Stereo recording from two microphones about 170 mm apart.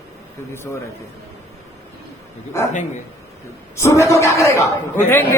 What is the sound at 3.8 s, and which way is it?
A man's voice, 15° left (ahead or behind).